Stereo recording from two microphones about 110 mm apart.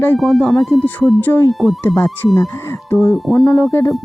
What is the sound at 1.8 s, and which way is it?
Speech, 20° left (ahead or behind).